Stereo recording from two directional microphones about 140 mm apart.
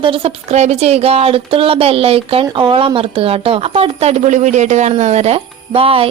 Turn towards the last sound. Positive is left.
turn(degrees=-40)  # may be behind; listen again after turning